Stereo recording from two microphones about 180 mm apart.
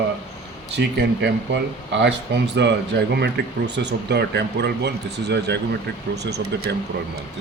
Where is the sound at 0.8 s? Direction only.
65° right (ahead or behind).